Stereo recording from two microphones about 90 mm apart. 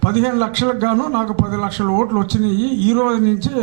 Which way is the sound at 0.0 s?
15° right (ahead or behind).